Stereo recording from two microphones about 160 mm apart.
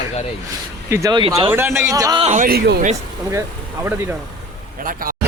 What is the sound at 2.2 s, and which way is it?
Speech, 50° right (ahead or behind).